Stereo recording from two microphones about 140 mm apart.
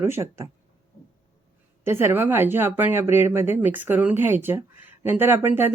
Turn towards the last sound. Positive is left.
turn(degrees=-15)  # may be behind; listen again after turning